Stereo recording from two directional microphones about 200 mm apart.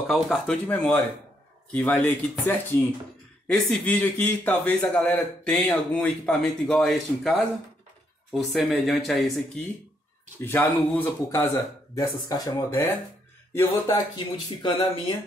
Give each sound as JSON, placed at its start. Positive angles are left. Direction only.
{"t": 0.0, "sound": "a man's voice", "side_deg": 0}